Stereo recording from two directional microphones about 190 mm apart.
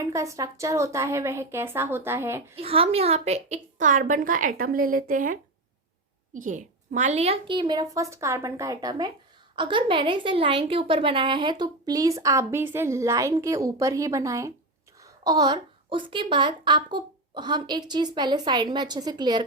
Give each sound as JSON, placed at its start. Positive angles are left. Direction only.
{"t": 0.0, "sound": "a woman's voice", "side_deg": -15}
{"t": 2.6, "sound": "a woman's voice", "side_deg": -30}